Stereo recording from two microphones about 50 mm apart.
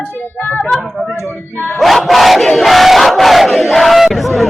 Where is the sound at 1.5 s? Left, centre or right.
Left.